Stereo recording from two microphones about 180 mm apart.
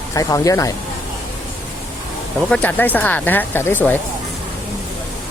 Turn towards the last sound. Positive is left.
turn(degrees=10)  # may be behind; listen again after turning